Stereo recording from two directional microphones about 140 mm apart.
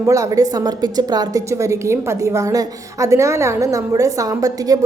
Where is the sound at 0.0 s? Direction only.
25° right (ahead or behind).